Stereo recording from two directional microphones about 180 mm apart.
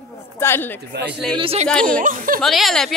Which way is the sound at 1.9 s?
50° right (ahead or behind).